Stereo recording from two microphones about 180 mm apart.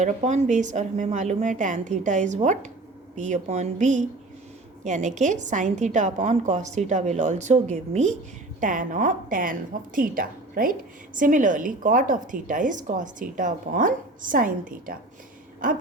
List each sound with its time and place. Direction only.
0.0 s a woman's voice: 40° right (ahead or behind)